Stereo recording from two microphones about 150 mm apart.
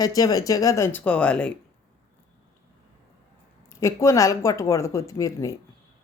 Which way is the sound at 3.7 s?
20° left (ahead or behind).